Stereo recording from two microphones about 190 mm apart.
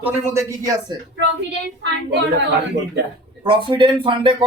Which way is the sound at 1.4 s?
65° right (ahead or behind).